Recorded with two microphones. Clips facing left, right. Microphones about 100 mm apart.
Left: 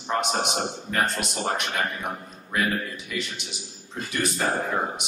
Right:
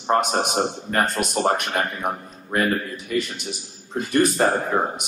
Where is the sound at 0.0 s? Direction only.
45° right (ahead or behind).